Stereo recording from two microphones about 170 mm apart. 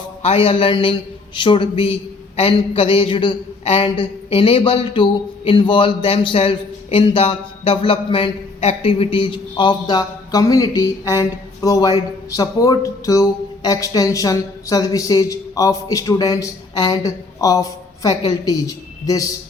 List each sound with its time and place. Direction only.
0.2 s a man's voice: 35° left (ahead or behind)